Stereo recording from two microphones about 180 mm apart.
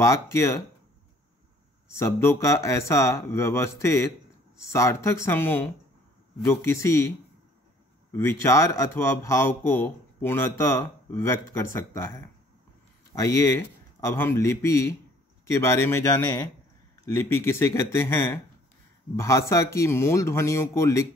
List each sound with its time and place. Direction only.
0.0 s speech: 15° left (ahead or behind)
2.0 s speech: 15° left (ahead or behind)
8.1 s speech: 15° left (ahead or behind)
13.1 s speech: 15° left (ahead or behind)